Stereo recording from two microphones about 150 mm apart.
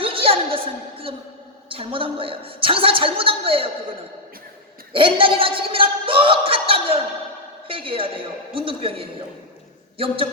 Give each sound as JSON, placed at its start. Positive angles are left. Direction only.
{"t": 0.0, "sound": "a sound", "side_deg": -40}
{"t": 1.7, "sound": "speech", "side_deg": -35}
{"t": 4.9, "sound": "speech", "side_deg": -35}